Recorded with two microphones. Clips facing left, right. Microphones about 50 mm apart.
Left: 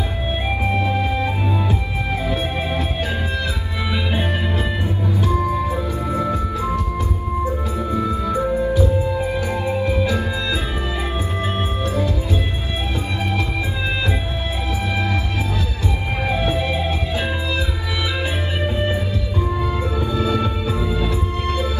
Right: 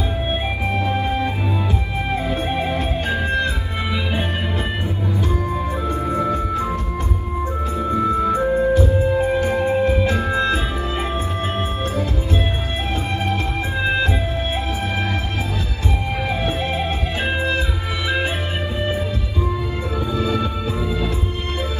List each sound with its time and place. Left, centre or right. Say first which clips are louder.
0.8 s music: even; right
2.3 s music: right 1 dB; right
5.5 s music: left 1 dB; right
7.9 s music: right 4 dB; right
16.4 s music: left 1 dB; right